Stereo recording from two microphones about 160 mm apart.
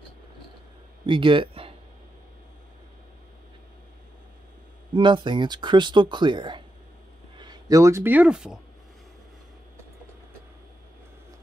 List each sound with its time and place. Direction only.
1.0 s speech: 30° right (ahead or behind)
4.9 s speech: 30° right (ahead or behind); by 8.5 s 5° right (ahead or behind)